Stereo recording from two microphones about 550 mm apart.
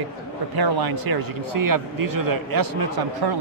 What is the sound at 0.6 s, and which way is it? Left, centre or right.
Speech, right.